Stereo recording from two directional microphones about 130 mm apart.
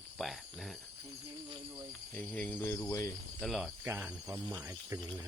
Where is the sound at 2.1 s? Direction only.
15° left (ahead or behind).